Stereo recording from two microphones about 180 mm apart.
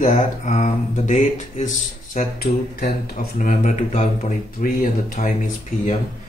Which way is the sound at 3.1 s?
40° left (ahead or behind).